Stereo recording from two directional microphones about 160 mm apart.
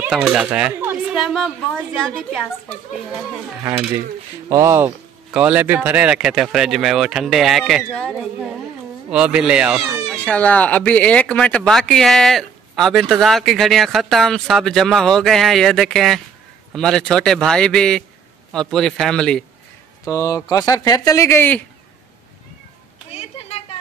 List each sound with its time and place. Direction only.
0.1 s speech: 5° right (ahead or behind)
4.5 s speech: 20° right (ahead or behind); by 8.1 s 5° left (ahead or behind)
9.1 s speech: 5° right (ahead or behind)
10.2 s speech: 10° left (ahead or behind)
20.1 s speech: 20° left (ahead or behind)
23.1 s a sound: 40° left (ahead or behind)